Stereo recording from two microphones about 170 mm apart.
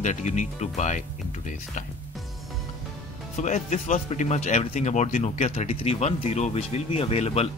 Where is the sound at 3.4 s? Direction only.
45° left (ahead or behind).